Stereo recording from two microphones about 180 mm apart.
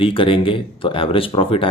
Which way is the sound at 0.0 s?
30° left (ahead or behind).